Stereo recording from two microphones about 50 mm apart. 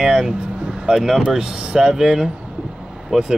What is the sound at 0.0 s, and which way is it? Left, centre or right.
Speech, centre.